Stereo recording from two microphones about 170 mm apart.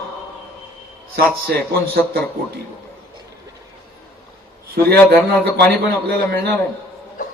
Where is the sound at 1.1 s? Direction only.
70° right (ahead or behind).